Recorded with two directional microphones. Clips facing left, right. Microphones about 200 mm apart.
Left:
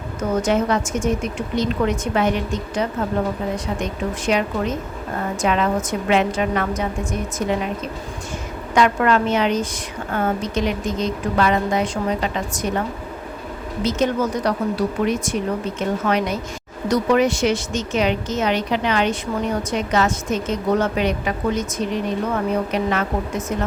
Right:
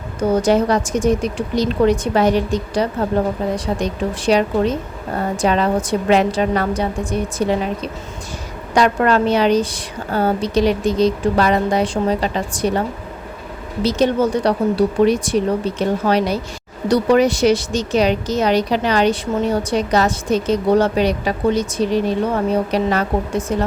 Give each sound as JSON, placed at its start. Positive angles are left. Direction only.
{"t": 0.2, "sound": "a woman's voice", "side_deg": -35}
{"t": 8.7, "sound": "a woman's voice", "side_deg": -35}
{"t": 13.8, "sound": "a woman's voice", "side_deg": -30}